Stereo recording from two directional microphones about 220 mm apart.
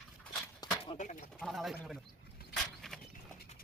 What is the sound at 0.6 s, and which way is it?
Clip-clop, 20° left (ahead or behind).